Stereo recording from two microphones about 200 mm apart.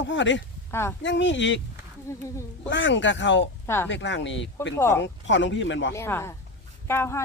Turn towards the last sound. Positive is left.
turn(degrees=10)  # may be behind; listen again after turning